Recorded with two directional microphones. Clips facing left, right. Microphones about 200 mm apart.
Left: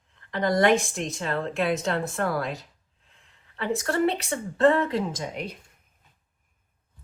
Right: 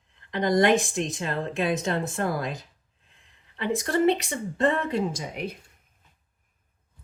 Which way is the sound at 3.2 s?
20° right (ahead or behind).